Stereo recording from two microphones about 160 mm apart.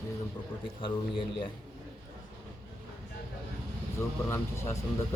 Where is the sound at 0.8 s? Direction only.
30° left (ahead or behind).